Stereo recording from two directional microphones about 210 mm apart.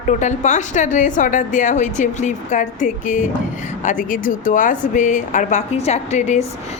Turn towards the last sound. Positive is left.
turn(degrees=35)  # may be behind; listen again after turning